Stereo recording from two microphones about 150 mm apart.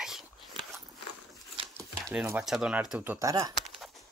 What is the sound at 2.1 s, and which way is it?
Speech, 10° right (ahead or behind).